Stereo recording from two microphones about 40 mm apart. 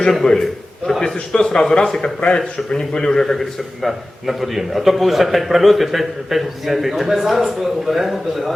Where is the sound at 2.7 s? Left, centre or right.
Centre.